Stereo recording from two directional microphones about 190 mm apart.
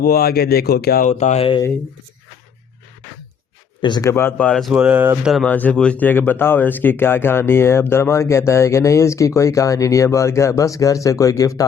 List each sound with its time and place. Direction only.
0.0 s speech: 50° left (ahead or behind)
1.2 s speech: 35° left (ahead or behind)
3.8 s speech: 25° left (ahead or behind)